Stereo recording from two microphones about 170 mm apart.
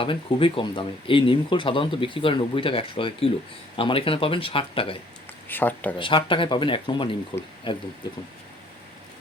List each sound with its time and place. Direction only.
0.0 s speech: 30° left (ahead or behind)
5.5 s speech: 10° left (ahead or behind)
6.0 s speech: 30° left (ahead or behind)